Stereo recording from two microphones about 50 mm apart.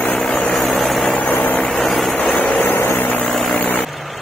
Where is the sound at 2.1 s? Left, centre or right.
Left.